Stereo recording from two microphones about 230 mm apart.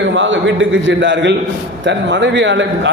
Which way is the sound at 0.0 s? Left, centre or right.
Right.